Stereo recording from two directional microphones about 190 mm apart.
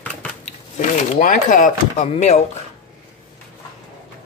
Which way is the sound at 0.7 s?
45° left (ahead or behind).